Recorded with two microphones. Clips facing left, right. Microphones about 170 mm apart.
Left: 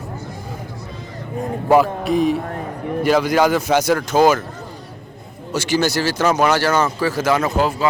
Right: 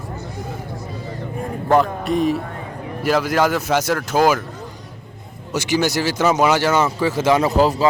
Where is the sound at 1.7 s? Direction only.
5° left (ahead or behind).